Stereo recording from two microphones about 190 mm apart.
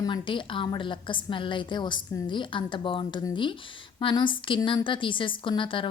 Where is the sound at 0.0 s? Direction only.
25° left (ahead or behind).